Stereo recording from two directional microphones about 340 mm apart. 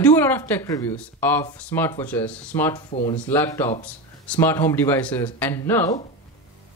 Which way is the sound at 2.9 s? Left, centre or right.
Centre.